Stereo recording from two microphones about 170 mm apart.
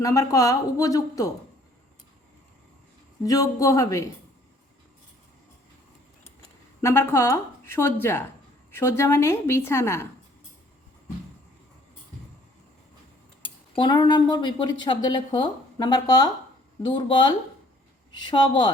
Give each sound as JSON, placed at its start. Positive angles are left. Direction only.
{"t": 0.0, "sound": "speech", "side_deg": 20}
{"t": 3.2, "sound": "speech", "side_deg": 20}
{"t": 6.8, "sound": "a woman's voice", "side_deg": 15}
{"t": 13.4, "sound": "speech", "side_deg": 30}